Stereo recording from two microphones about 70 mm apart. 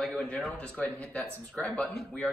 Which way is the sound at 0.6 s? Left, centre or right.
Left.